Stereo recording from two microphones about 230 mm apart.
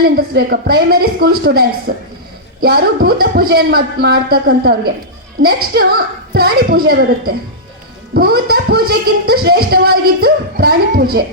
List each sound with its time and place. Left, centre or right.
0.2 s speech: right